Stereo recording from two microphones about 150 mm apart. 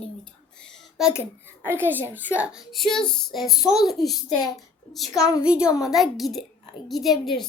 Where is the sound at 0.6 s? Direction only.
Centre (ahead or behind).